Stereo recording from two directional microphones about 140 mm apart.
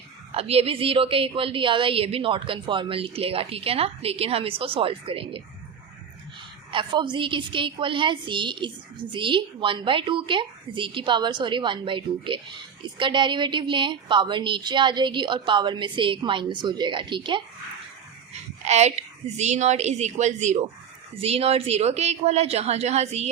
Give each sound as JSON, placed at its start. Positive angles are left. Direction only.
{"t": 0.3, "sound": "a woman's voice", "side_deg": -45}
{"t": 6.7, "sound": "a woman's voice", "side_deg": -35}
{"t": 18.6, "sound": "a woman's voice", "side_deg": -55}